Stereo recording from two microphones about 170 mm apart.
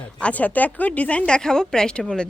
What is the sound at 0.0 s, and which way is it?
Speech, 5° left (ahead or behind).